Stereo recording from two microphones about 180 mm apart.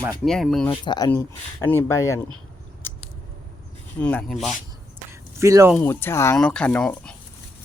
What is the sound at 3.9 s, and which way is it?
Speech, 5° left (ahead or behind).